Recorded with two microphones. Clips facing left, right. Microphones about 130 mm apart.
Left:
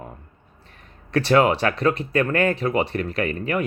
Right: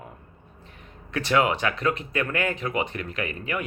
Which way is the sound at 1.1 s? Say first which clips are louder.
Left 5 dB; 35° left (ahead or behind).